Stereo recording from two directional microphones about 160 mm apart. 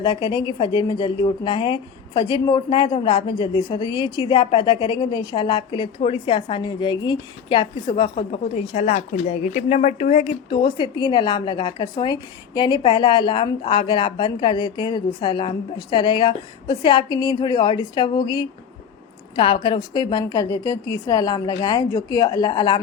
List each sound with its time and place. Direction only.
0.0 s a woman's voice: 30° left (ahead or behind)